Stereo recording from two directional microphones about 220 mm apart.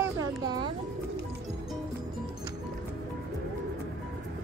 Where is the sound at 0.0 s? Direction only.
20° right (ahead or behind).